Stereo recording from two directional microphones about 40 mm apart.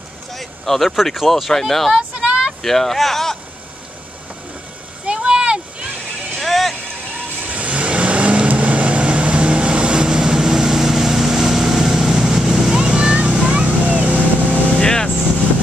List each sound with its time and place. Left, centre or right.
0.3 s vehicle: centre
1.3 s speech: centre
2.0 s a sound: right
2.6 s speech: centre
5.0 s a sound: right
6.4 s vehicle: centre
7.2 s vehicle: right; by 12.7 s centre
12.7 s vehicle: right
14.8 s vehicle: centre